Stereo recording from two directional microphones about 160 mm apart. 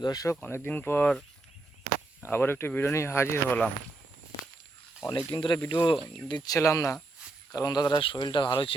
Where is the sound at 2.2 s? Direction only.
15° left (ahead or behind).